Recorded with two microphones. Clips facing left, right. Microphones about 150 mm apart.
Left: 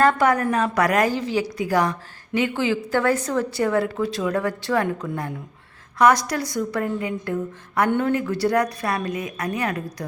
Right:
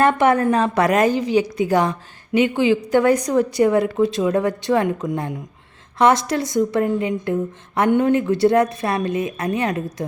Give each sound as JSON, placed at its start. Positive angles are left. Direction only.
{"t": 0.0, "sound": "a woman's voice", "side_deg": -20}